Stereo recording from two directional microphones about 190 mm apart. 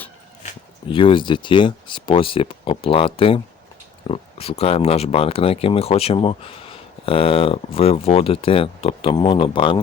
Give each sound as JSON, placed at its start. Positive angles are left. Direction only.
{"t": 0.9, "sound": "speech", "side_deg": 25}